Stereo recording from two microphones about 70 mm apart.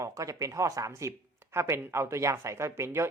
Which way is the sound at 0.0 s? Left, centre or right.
Right.